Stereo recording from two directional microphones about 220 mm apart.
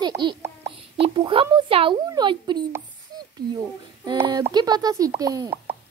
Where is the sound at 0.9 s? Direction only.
25° right (ahead or behind).